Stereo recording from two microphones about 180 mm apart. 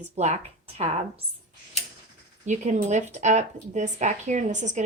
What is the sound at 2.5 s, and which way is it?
A woman's voice, 40° right (ahead or behind).